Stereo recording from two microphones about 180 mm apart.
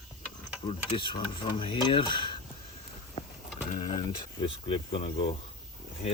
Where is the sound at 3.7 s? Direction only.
25° left (ahead or behind).